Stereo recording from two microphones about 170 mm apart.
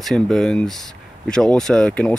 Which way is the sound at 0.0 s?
Centre (ahead or behind).